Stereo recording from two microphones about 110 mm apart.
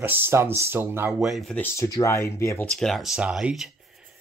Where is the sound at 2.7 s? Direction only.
5° left (ahead or behind).